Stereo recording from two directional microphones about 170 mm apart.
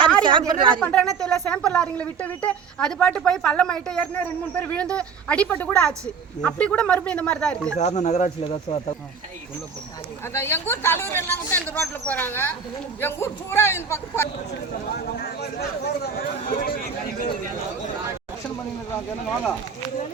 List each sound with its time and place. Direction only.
0.3 s speech: 30° right (ahead or behind)
0.8 s speech: 5° left (ahead or behind)
7.8 s speech: 40° left (ahead or behind)
8.4 s speech: 30° left (ahead or behind)
10.3 s speech: 15° left (ahead or behind)
14.9 s speech: 70° left (ahead or behind)